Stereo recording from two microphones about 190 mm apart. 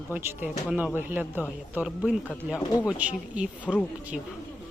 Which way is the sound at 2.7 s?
20° left (ahead or behind).